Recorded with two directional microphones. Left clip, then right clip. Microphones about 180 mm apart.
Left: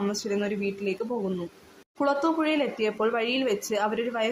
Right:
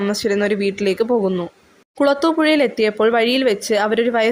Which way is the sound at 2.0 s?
30° right (ahead or behind).